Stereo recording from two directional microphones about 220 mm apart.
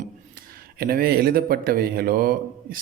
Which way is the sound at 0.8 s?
45° right (ahead or behind).